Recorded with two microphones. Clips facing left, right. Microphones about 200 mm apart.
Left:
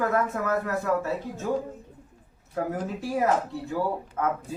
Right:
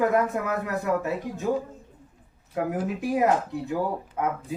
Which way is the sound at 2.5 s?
15° right (ahead or behind).